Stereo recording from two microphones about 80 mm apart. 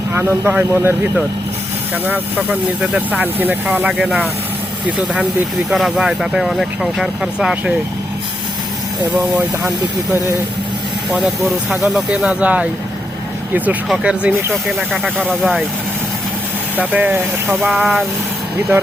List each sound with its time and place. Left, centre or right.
0.1 s speech: right
3.8 s speech: centre
5.7 s speech: centre
11.1 s speech: centre
12.1 s speech: centre
14.0 s speech: centre
14.5 s speech: centre
16.7 s speech: centre
17.5 s speech: centre